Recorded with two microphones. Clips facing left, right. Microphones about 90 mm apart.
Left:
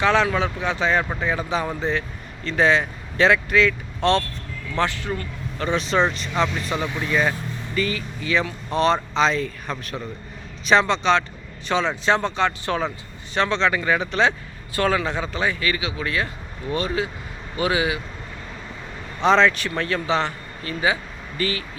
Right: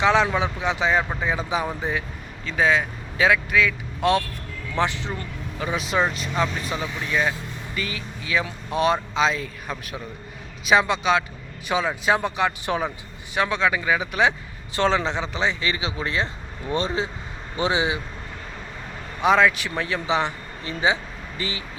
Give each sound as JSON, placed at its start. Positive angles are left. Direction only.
{"t": 0.0, "sound": "speech", "side_deg": -15}
{"t": 5.5, "sound": "speech", "side_deg": -5}
{"t": 19.2, "sound": "a man's voice", "side_deg": -10}